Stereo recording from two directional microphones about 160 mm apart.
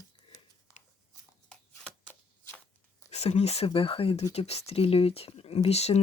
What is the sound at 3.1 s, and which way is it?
Speech, 40° left (ahead or behind).